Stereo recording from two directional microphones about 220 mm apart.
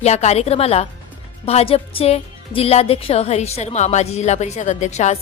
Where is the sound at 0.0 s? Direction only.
30° left (ahead or behind).